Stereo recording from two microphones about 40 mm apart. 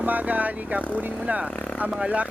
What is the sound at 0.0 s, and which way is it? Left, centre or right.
Speech, right.